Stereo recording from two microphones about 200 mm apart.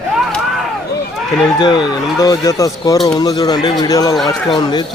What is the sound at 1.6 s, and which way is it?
Speech, 20° left (ahead or behind).